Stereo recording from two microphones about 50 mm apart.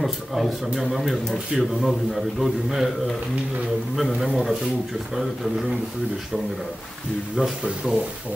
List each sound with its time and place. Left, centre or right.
0.0 s a man's voice: centre
3.9 s a man's voice: centre
7.6 s speech: right